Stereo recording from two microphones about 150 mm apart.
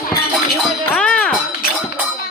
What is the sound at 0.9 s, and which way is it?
Music, 5° left (ahead or behind).